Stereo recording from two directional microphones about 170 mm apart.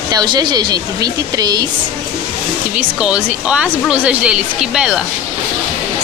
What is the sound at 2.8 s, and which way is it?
A woman's voice, 5° right (ahead or behind).